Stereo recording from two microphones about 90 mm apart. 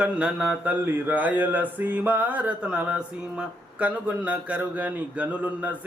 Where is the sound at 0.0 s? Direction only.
15° right (ahead or behind).